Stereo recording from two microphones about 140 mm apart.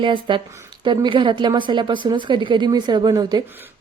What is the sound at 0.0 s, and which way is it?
Speech, 35° right (ahead or behind).